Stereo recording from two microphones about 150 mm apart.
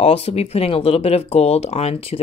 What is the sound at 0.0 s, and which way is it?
Speech, 45° left (ahead or behind).